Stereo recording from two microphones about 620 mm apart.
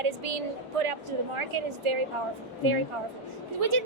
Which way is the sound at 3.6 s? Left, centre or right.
Right.